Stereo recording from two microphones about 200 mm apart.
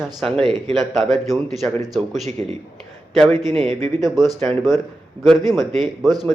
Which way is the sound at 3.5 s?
30° right (ahead or behind).